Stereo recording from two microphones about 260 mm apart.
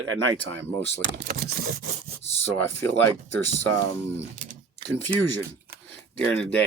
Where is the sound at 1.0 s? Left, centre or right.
Right.